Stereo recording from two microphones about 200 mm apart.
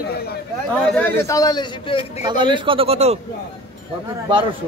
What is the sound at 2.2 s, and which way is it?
Speech, 20° right (ahead or behind).